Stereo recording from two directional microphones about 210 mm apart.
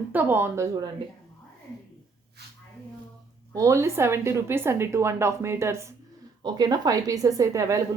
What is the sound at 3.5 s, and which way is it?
A woman's voice, 15° right (ahead or behind).